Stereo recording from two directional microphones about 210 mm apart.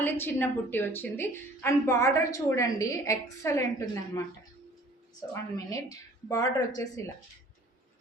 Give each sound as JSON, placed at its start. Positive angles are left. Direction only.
{"t": 0.0, "sound": "a woman's voice", "side_deg": 10}
{"t": 5.3, "sound": "a woman's voice", "side_deg": 15}